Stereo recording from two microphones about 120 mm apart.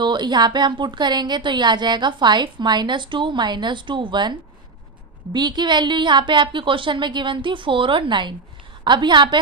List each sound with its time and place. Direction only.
0.0 s a woman's voice: 40° right (ahead or behind)